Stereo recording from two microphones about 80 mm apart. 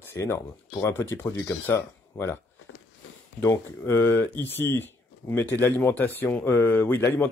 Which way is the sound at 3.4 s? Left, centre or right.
Left.